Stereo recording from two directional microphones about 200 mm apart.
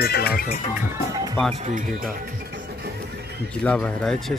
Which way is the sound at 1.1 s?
15° right (ahead or behind).